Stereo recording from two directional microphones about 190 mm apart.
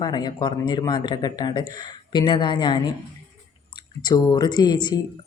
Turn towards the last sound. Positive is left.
turn(degrees=20)  # may be behind; listen again after turning